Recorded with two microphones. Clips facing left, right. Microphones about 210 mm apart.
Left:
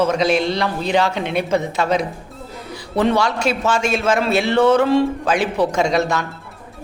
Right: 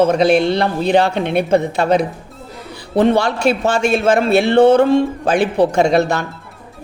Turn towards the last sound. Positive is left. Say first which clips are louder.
# right 4 dB
turn(degrees=-60)  # may be behind; listen again after turning